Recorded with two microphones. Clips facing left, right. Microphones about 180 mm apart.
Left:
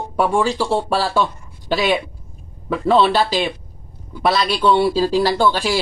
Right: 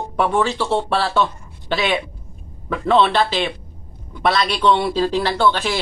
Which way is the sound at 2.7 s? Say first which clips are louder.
Left 1 dB; 5° left (ahead or behind).